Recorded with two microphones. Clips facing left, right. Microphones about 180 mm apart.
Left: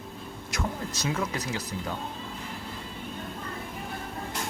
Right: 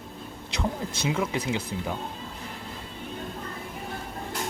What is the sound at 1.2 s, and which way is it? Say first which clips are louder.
Speech: right 4 dB; 25° right (ahead or behind).